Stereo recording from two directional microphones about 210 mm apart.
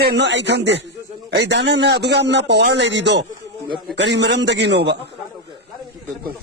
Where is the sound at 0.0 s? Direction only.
55° right (ahead or behind).